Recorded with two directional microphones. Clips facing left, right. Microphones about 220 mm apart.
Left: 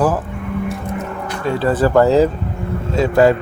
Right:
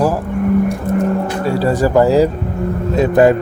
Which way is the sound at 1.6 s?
10° right (ahead or behind).